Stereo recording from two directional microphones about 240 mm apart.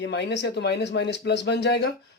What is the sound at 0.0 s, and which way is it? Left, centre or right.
Speech, left.